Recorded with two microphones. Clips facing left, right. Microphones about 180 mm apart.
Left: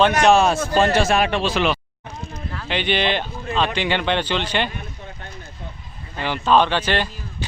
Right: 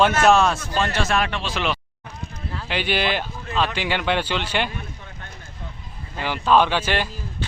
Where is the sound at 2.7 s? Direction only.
5° right (ahead or behind).